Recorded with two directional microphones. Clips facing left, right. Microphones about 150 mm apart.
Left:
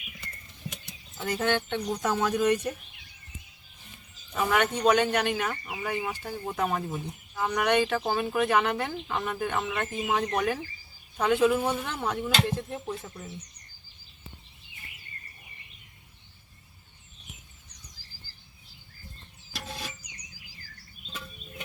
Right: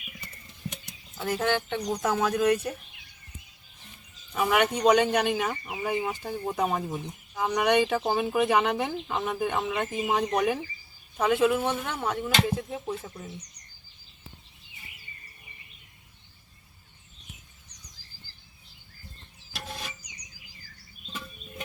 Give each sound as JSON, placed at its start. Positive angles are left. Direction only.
{"t": 1.2, "sound": "speech", "side_deg": -5}
{"t": 4.4, "sound": "speech", "side_deg": -10}
{"t": 20.0, "sound": "a sound", "side_deg": 55}